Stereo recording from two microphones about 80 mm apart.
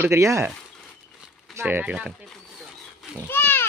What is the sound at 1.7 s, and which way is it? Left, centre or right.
Speech, centre.